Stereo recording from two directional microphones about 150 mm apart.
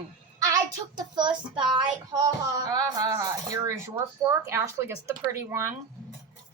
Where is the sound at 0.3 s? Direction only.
25° right (ahead or behind).